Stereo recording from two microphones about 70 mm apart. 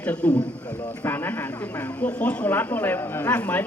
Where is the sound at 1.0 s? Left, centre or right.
Left.